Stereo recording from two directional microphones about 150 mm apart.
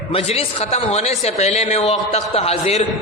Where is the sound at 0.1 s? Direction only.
45° left (ahead or behind).